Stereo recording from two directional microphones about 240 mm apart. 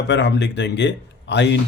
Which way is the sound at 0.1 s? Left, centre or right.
Left.